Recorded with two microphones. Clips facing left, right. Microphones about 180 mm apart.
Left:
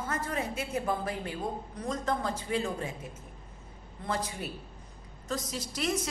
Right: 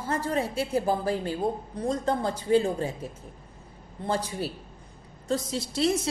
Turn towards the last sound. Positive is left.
turn(degrees=-30)  # may be behind; listen again after turning